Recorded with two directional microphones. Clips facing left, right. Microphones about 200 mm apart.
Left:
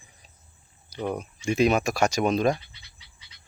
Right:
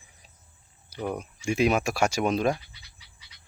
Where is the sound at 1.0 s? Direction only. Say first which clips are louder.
Left 2 dB; 5° right (ahead or behind).